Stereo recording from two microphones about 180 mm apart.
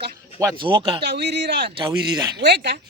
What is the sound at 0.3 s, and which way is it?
Speech, 20° right (ahead or behind).